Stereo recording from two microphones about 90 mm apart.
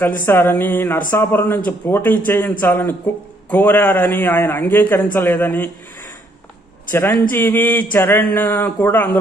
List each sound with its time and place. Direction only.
0.3 s a man's voice: 25° left (ahead or behind)
6.9 s a man's voice: 20° left (ahead or behind)